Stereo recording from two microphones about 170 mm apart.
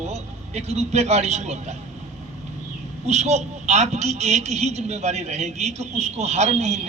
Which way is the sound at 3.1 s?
40° right (ahead or behind).